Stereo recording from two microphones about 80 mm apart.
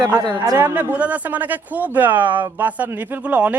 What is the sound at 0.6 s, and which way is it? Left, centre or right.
A man's voice, right.